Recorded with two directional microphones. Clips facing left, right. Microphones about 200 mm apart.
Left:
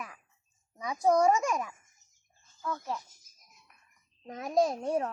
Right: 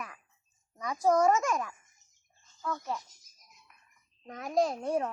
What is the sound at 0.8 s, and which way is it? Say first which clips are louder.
Speech: even; 15° left (ahead or behind).